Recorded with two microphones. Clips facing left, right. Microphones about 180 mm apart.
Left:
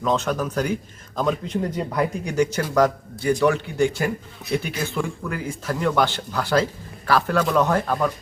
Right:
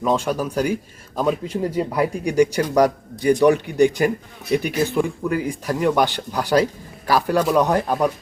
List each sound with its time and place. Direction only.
0.0 s speech: 10° right (ahead or behind)